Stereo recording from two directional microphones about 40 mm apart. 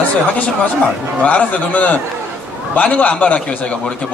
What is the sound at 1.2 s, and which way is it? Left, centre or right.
A man's voice, left.